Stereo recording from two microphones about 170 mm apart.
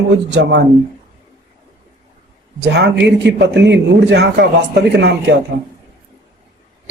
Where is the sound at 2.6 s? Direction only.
80° right.